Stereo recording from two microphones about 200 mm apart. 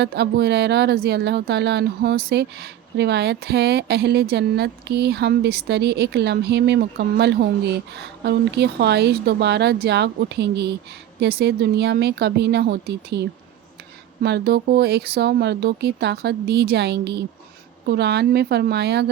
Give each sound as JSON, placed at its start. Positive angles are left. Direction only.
{"t": 0.0, "sound": "speech", "side_deg": -55}